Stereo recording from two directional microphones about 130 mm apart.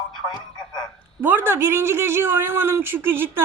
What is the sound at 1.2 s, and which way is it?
Speech, 15° right (ahead or behind).